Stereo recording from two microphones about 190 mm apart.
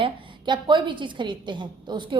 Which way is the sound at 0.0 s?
25° right (ahead or behind).